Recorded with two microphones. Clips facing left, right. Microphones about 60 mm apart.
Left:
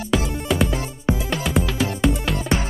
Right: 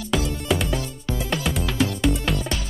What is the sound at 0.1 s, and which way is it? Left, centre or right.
Music, centre.